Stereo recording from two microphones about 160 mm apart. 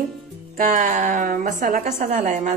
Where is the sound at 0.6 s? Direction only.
50° right (ahead or behind).